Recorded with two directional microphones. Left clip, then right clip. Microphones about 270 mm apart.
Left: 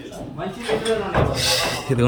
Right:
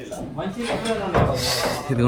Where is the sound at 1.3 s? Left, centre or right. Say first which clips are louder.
Left 2 dB; centre.